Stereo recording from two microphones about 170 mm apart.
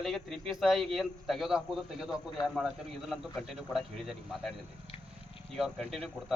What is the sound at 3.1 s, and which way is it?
A man's voice, centre (ahead or behind).